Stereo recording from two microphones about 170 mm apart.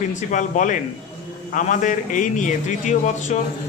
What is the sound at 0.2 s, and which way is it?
A man's voice, 45° left (ahead or behind).